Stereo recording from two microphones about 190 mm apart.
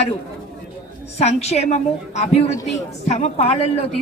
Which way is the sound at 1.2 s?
35° left (ahead or behind).